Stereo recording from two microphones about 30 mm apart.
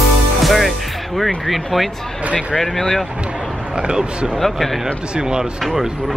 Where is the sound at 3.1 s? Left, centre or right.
Right.